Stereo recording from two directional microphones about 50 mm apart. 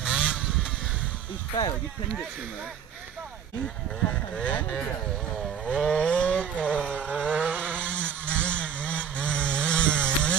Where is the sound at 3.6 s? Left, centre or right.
Left.